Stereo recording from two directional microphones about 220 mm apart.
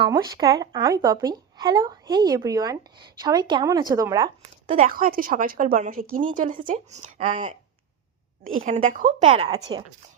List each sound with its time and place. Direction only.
0.0 s speech: 15° right (ahead or behind)
4.6 s a woman's voice: 35° right (ahead or behind)
8.6 s a woman's voice: 35° right (ahead or behind)